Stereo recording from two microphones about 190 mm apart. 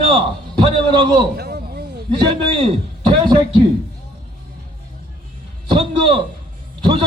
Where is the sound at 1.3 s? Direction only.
55° right (ahead or behind).